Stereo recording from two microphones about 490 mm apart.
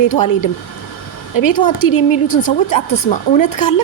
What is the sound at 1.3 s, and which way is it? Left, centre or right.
A woman's voice, left.